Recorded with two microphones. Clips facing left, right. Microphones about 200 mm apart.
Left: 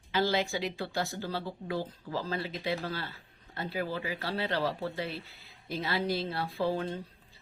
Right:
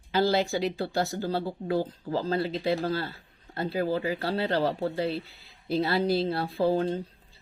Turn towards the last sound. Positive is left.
turn(degrees=-35)  # may be behind; listen again after turning